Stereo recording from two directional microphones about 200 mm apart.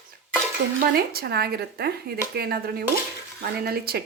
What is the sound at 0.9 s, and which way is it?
Speech, 50° right (ahead or behind).